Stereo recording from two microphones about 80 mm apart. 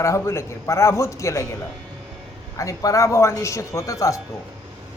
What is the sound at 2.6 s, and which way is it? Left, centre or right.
A woman's voice, left.